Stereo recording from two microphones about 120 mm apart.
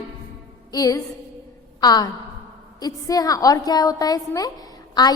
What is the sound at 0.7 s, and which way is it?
A woman's voice, 30° left (ahead or behind).